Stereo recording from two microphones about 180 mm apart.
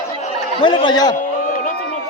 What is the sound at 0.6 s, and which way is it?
Speech, 25° left (ahead or behind).